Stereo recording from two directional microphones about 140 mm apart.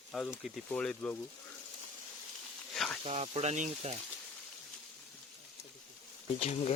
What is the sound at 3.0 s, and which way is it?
Speech, 45° right (ahead or behind).